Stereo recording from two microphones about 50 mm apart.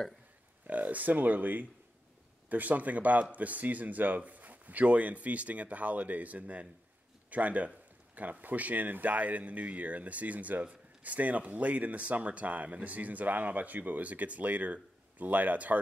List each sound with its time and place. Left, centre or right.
0.7 s speech: right